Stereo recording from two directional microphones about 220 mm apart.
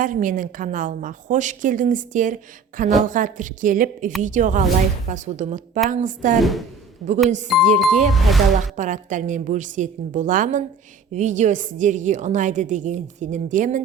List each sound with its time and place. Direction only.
0.0 s a woman's voice: 40° right (ahead or behind)
6.4 s speech: centre (ahead or behind)
8.7 s a woman's voice: 35° right (ahead or behind)